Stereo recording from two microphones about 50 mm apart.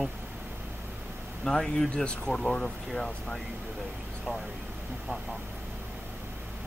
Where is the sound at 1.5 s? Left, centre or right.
Centre.